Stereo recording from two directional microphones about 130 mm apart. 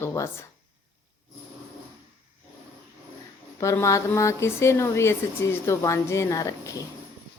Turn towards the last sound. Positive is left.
turn(degrees=25)  # may be behind; listen again after turning